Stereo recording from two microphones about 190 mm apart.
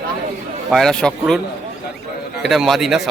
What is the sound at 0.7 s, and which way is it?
Speech, centre (ahead or behind).